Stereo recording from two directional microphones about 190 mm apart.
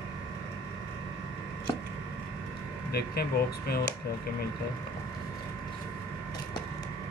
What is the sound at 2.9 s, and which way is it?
Speech, 55° left (ahead or behind).